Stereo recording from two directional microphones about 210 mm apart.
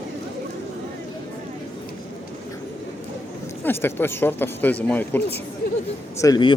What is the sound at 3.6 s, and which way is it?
Speech, 10° left (ahead or behind).